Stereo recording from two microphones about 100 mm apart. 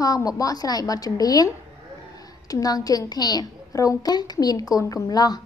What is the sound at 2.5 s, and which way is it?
A woman's voice, 40° left (ahead or behind).